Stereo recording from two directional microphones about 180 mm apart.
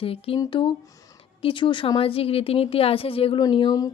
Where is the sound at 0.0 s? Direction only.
30° left (ahead or behind).